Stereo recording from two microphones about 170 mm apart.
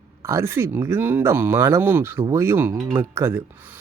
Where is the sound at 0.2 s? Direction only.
15° right (ahead or behind).